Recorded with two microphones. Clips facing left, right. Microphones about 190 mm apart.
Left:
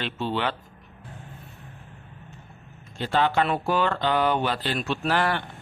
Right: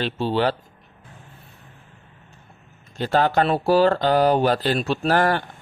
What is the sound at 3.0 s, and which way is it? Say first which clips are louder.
Speech: right 4 dB; 40° right (ahead or behind).